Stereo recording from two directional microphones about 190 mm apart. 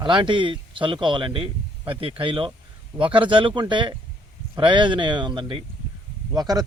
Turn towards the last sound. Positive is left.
turn(degrees=-20)  # may be behind; listen again after turning